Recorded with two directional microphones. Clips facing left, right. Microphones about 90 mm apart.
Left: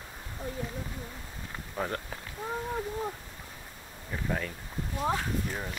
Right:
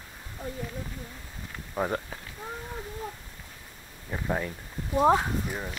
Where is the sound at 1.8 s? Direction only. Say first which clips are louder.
Right 4 dB; 15° right (ahead or behind).